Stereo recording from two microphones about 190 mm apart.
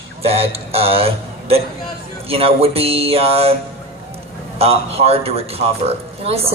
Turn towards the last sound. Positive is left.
turn(degrees=-30)  # may be behind; listen again after turning